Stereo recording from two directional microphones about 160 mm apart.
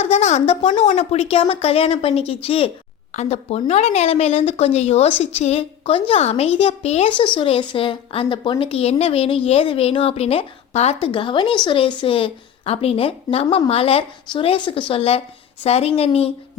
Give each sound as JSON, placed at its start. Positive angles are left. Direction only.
{"t": 0.0, "sound": "a woman's voice", "side_deg": 45}